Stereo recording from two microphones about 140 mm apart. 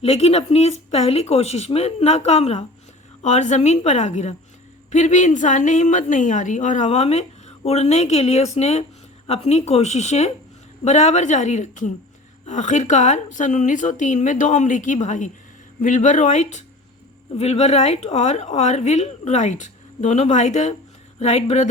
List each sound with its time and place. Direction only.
0.0 s a woman's voice: 45° left (ahead or behind)